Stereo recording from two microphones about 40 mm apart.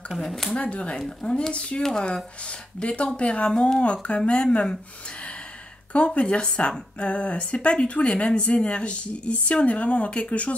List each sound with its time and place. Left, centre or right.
0.2 s speech: centre
0.6 s speech: left
1.8 s speech: centre
2.0 s speech: left
5.9 s speech: left